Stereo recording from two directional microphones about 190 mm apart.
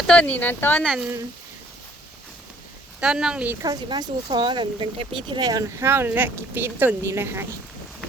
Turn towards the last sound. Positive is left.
turn(degrees=-15)  # may be behind; listen again after turning